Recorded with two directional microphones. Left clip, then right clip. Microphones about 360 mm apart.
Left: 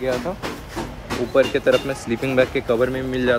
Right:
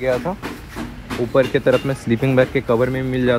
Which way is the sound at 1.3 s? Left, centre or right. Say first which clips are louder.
Right 1 dB; centre.